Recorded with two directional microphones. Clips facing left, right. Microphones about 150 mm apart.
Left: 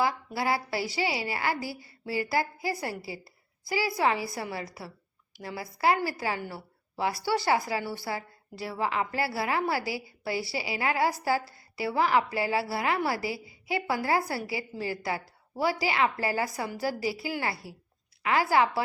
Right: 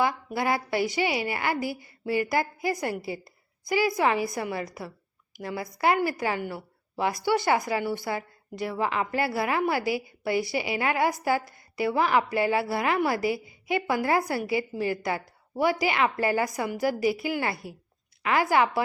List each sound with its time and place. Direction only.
0.0 s a woman's voice: 20° right (ahead or behind)
8.8 s a woman's voice: 20° left (ahead or behind)
9.1 s a woman's voice: 20° right (ahead or behind)